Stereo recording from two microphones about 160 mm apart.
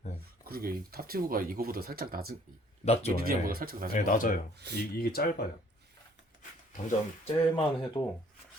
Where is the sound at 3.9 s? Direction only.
55° left (ahead or behind).